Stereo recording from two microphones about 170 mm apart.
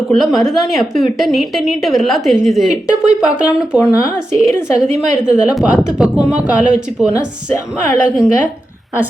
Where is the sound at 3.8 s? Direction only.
20° left (ahead or behind).